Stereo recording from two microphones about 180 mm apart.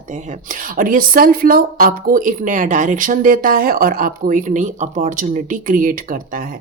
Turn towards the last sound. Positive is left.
turn(degrees=-50)  # may be behind; listen again after turning